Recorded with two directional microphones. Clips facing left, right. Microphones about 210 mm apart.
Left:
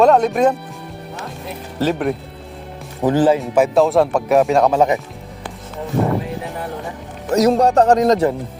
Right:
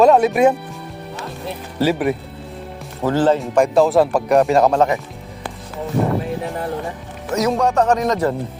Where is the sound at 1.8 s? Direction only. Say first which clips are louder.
Right 1 dB; 5° right (ahead or behind).